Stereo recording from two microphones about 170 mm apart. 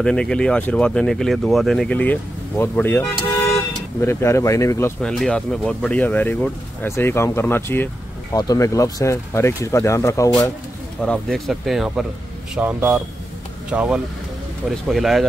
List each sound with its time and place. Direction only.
0.0 s speech: 5° left (ahead or behind)
5.0 s speech: 5° left (ahead or behind)
11.0 s speech: 5° left (ahead or behind)